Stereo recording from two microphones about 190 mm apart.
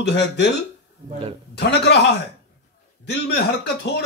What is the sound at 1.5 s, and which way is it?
Speech, 60° left (ahead or behind).